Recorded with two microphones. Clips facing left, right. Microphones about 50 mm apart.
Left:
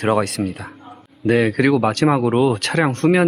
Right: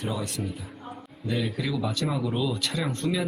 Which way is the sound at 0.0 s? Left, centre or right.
Left.